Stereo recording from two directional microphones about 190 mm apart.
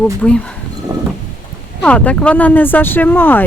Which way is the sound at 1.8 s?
5° left (ahead or behind).